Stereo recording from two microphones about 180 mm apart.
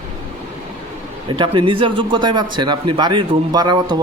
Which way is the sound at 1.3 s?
30° right (ahead or behind).